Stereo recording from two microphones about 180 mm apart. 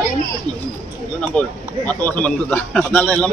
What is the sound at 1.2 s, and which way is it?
Speech, 10° left (ahead or behind).